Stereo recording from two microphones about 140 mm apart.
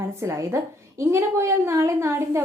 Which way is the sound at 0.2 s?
20° right (ahead or behind).